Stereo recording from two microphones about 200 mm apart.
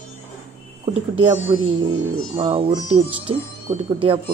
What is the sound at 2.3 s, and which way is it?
Speech, 30° right (ahead or behind).